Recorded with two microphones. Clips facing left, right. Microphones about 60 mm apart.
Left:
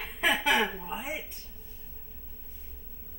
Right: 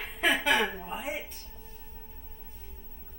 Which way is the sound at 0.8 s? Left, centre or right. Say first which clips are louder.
Even; centre.